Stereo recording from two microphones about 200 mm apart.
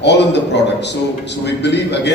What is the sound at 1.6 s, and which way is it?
Speech, 60° left (ahead or behind).